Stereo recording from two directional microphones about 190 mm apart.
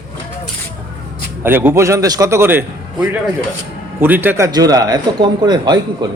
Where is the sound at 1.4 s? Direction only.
10° right (ahead or behind).